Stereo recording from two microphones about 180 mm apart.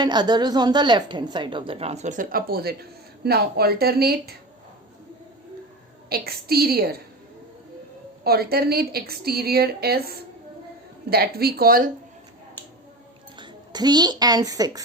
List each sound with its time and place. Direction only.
0.0 s a woman's voice: 25° right (ahead or behind); by 4.4 s 60° right (ahead or behind)
6.1 s a woman's voice: 60° right (ahead or behind)
8.2 s a woman's voice: 60° right (ahead or behind)
13.4 s a woman's voice: 25° right (ahead or behind)